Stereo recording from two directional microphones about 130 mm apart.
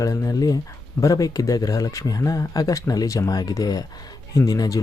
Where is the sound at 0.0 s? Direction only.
25° left (ahead or behind).